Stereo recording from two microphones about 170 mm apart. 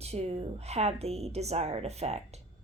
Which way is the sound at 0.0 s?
35° right (ahead or behind).